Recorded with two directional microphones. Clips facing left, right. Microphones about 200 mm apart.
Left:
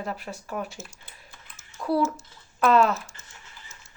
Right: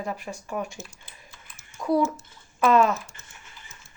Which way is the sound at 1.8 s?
15° right (ahead or behind).